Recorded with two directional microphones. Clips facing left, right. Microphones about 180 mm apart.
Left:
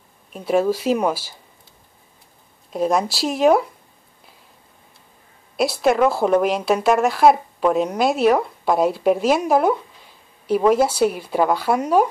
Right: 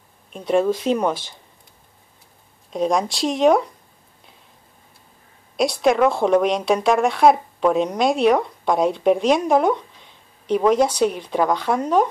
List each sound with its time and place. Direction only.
0.3 s a woman's voice: 5° left (ahead or behind)
2.7 s a woman's voice: 5° left (ahead or behind)
5.6 s a woman's voice: 5° left (ahead or behind)